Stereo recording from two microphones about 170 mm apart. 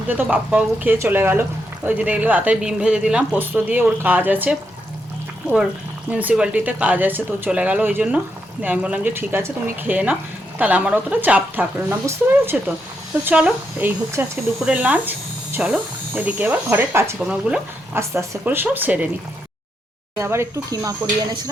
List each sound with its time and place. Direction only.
0.2 s speech: 10° right (ahead or behind)
6.1 s speech: 10° right (ahead or behind)
20.1 s speech: 15° right (ahead or behind)